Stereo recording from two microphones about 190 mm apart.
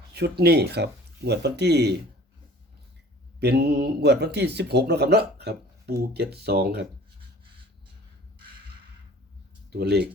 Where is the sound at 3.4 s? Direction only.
60° right (ahead or behind).